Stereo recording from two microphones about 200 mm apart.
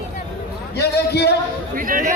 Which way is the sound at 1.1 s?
55° left (ahead or behind).